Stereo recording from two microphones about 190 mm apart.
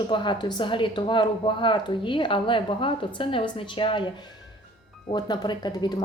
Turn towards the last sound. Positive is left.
turn(degrees=20)  # may be behind; listen again after turning